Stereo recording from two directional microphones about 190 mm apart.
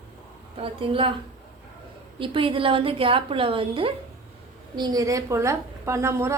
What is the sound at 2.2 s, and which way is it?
A woman's voice, 25° right (ahead or behind).